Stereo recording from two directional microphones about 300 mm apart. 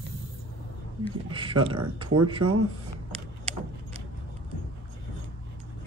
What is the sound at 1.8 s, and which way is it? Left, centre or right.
Speech, right.